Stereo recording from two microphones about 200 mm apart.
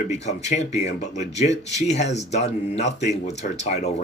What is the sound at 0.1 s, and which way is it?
Speech, 35° left (ahead or behind).